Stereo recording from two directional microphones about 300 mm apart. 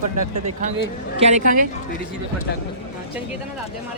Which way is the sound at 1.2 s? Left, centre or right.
Right.